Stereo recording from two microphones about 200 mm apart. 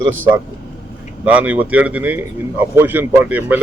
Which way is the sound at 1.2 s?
5° right (ahead or behind).